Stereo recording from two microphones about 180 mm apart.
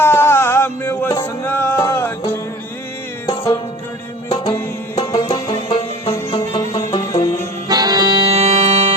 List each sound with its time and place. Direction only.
0.0 s music: 15° left (ahead or behind); by 6.1 s 30° left (ahead or behind)
6.7 s music: 20° left (ahead or behind)
7.7 s accordion: 20° right (ahead or behind)